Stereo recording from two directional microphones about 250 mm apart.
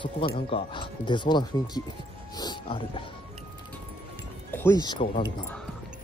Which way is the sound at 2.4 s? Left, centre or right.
Centre.